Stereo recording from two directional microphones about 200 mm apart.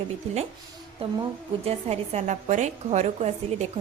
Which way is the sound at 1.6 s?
30° right (ahead or behind).